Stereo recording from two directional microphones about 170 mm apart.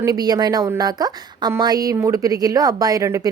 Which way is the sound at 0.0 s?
20° right (ahead or behind).